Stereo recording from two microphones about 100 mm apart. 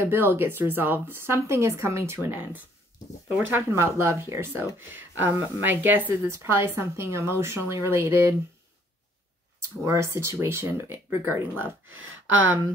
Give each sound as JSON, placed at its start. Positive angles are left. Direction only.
{"t": 0.0, "sound": "a woman's voice", "side_deg": -20}
{"t": 9.8, "sound": "a woman's voice", "side_deg": -25}